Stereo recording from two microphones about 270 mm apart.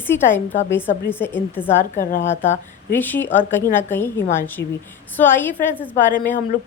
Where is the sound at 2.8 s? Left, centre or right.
Centre.